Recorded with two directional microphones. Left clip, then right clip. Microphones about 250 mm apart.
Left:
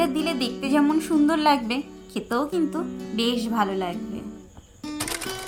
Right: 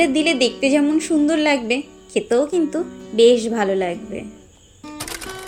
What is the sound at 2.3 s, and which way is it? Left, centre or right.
Speech, left.